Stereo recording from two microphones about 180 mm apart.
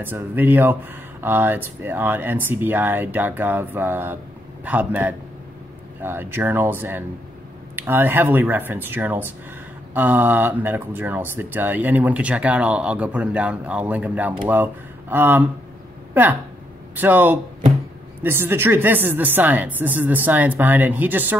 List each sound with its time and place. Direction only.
0.0 s speech: 10° right (ahead or behind)